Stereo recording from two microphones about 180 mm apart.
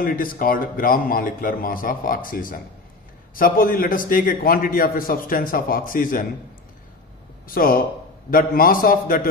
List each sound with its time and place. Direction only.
0.0 s a man's voice: 50° left (ahead or behind)
7.4 s a man's voice: 50° left (ahead or behind)